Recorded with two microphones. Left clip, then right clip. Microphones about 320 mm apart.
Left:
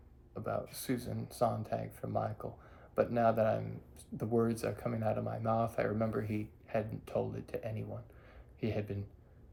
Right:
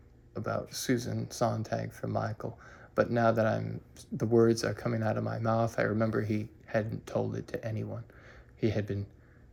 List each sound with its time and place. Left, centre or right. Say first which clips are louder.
0.3 s speech: right 4 dB; centre